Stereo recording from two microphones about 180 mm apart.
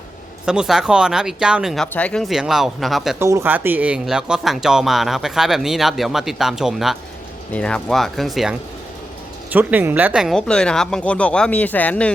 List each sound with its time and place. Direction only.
0.4 s speech: 5° right (ahead or behind)
3.2 s speech: 15° right (ahead or behind); by 12.1 s 5° left (ahead or behind)